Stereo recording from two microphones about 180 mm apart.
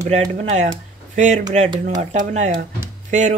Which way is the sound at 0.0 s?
40° right (ahead or behind).